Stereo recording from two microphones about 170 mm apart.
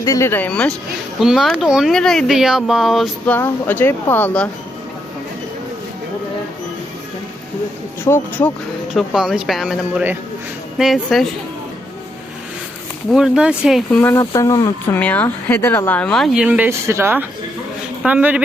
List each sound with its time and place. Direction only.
0.0 s speech: 20° left (ahead or behind); by 3.3 s centre (ahead or behind)
3.3 s speech: 10° left (ahead or behind)
8.0 s speech: 10° left (ahead or behind)
8.9 s speech: centre (ahead or behind)
13.1 s speech: 5° right (ahead or behind)
14.0 s speech: 15° left (ahead or behind)
14.9 s a man's voice: 10° left (ahead or behind); by 18.4 s 10° right (ahead or behind)